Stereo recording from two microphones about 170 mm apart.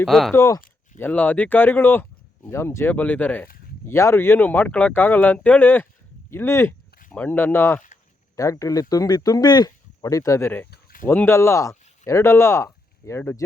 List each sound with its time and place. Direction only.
0.0 s speech: centre (ahead or behind)
0.3 s speech: 15° left (ahead or behind)
10.7 s a sound: 60° left (ahead or behind)
11.1 s speech: 10° left (ahead or behind)